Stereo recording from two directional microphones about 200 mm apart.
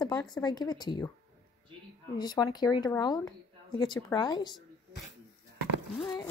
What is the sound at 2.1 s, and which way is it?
Speech, 20° left (ahead or behind).